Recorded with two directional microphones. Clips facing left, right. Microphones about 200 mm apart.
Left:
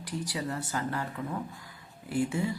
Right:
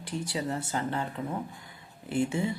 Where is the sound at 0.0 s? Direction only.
25° right (ahead or behind).